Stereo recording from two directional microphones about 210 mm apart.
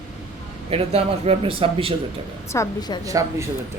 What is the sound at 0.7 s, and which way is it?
A man's voice, 25° right (ahead or behind).